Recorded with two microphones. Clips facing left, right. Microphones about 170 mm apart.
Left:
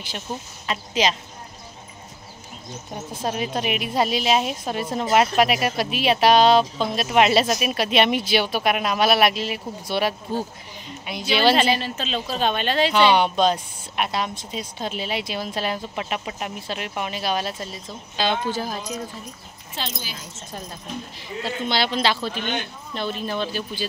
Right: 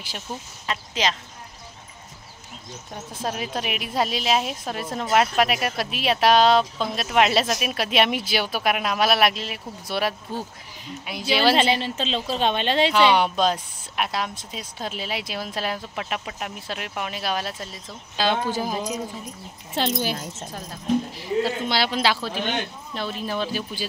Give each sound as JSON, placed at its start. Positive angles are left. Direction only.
{"t": 0.3, "sound": "speech", "side_deg": 25}
{"t": 0.7, "sound": "speech", "side_deg": 15}
{"t": 3.1, "sound": "a woman's voice", "side_deg": 0}
{"t": 11.5, "sound": "speech", "side_deg": -25}
{"t": 12.9, "sound": "a woman's voice", "side_deg": 0}
{"t": 19.7, "sound": "speech", "side_deg": -65}
{"t": 21.2, "sound": "speech", "side_deg": -10}